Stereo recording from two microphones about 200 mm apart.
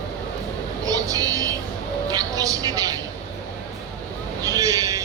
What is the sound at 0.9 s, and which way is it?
Vehicle, 15° right (ahead or behind).